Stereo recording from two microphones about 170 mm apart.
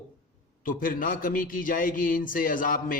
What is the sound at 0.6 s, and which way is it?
A man's voice, 55° left (ahead or behind).